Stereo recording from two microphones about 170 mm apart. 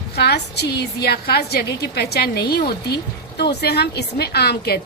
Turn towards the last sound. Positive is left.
turn(degrees=70)  # may be behind; listen again after turning